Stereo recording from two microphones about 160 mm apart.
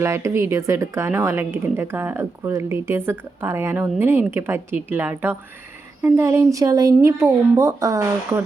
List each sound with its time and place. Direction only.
0.0 s speech: 15° right (ahead or behind)